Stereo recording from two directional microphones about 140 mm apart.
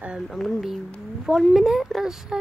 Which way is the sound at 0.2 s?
5° left (ahead or behind).